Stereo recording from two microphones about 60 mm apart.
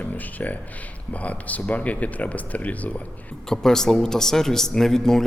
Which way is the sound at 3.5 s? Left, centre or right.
Centre.